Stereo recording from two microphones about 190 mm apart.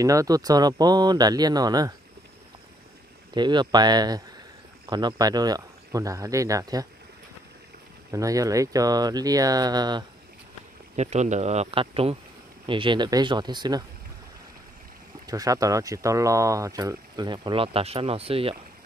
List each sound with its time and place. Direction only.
0.0 s speech: 15° right (ahead or behind)
3.3 s speech: 25° right (ahead or behind)
8.1 s speech: 15° right (ahead or behind)
11.0 s speech: 35° right (ahead or behind); by 13.8 s 20° right (ahead or behind)
15.2 s speech: 20° right (ahead or behind)